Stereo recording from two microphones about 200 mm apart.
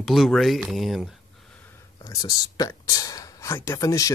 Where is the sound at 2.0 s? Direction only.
20° left (ahead or behind).